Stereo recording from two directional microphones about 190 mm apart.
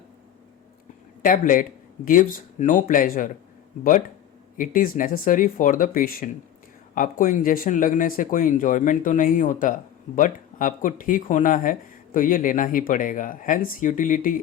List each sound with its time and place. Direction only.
1.2 s speech: 45° left (ahead or behind)
4.5 s speech: 45° left (ahead or behind)